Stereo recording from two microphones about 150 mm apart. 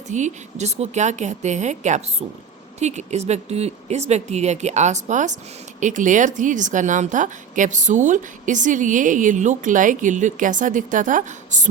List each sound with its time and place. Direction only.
0.1 s a woman's voice: 50° right (ahead or behind)